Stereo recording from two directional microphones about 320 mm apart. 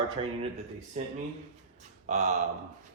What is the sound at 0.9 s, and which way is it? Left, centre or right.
Speech, right.